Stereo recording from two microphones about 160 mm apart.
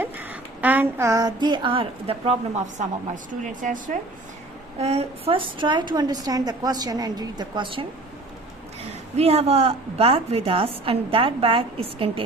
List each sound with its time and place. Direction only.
0.0 s a woman's voice: 10° right (ahead or behind); by 2.8 s 40° right (ahead or behind)
3.6 s speech: 55° right (ahead or behind)
4.8 s a woman's voice: 40° right (ahead or behind)
9.1 s a woman's voice: 40° right (ahead or behind)